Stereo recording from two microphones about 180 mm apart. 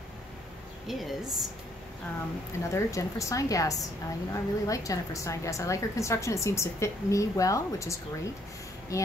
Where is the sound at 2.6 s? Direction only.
15° left (ahead or behind).